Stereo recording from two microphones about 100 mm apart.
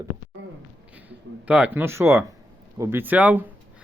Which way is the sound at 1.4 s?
15° right (ahead or behind).